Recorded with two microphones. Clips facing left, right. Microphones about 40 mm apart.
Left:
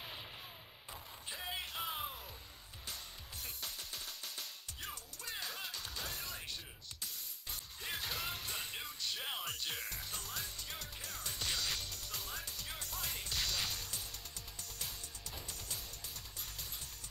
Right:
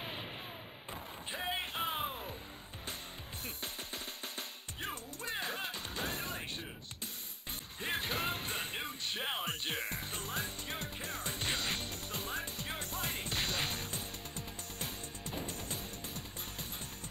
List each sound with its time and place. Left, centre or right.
1.3 s music: right
3.4 s music: right
7.8 s music: right